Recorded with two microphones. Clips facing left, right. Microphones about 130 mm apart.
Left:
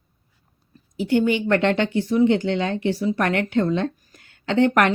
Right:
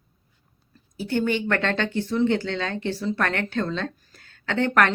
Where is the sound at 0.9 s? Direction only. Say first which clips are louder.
Left 5 dB; 15° left (ahead or behind).